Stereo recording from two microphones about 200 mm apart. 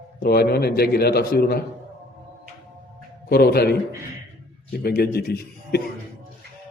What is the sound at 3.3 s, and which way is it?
Speech, 50° left (ahead or behind).